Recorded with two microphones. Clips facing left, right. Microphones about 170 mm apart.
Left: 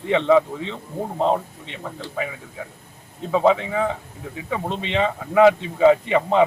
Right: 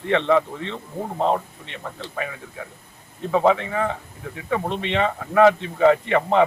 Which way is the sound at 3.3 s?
10° left (ahead or behind).